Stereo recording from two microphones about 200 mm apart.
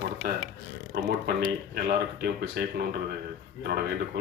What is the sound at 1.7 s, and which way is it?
Speech, 55° right (ahead or behind).